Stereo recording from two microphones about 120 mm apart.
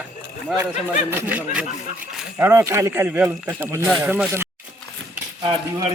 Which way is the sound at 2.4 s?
25° right (ahead or behind).